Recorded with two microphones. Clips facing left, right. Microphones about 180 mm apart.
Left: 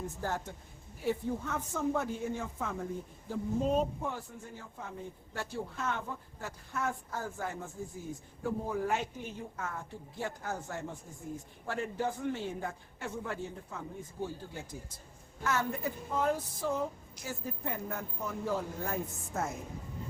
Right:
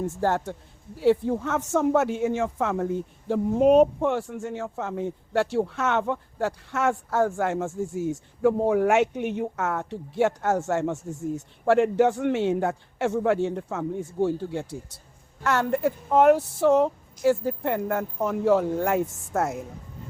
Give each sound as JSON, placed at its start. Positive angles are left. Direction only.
{"t": 0.0, "sound": "speech", "side_deg": -75}